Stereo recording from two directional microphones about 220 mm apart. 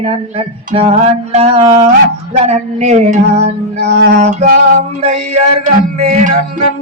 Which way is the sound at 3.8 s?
50° right (ahead or behind).